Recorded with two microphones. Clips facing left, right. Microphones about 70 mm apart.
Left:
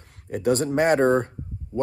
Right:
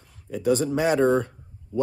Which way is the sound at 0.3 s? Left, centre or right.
Left.